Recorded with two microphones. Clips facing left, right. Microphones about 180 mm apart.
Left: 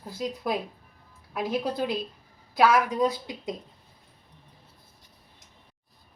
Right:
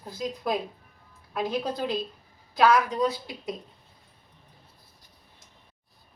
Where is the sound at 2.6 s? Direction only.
10° left (ahead or behind).